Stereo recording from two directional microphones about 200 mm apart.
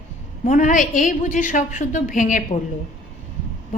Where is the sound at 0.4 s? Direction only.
40° left (ahead or behind).